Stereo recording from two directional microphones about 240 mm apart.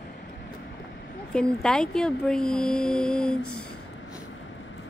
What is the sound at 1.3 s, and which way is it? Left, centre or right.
Speech, centre.